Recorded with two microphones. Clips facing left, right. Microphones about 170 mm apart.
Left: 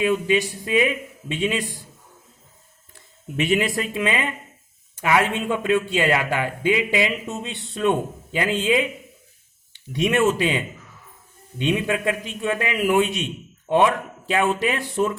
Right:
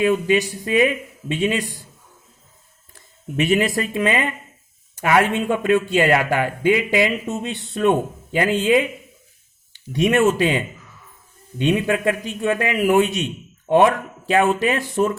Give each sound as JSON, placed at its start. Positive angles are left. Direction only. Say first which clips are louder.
{"t": 0.0, "sound": "speech", "louder": "right 3 dB", "side_deg": -45}
{"t": 3.3, "sound": "speech", "louder": "right 3 dB", "side_deg": -45}
{"t": 9.9, "sound": "speech", "louder": "right 3 dB", "side_deg": -45}
{"t": 11.6, "sound": "speech", "louder": "right 3 dB", "side_deg": -50}